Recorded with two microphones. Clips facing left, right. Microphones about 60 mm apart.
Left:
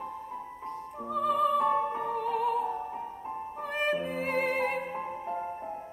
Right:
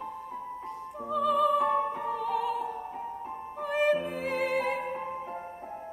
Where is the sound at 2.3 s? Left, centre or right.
Left.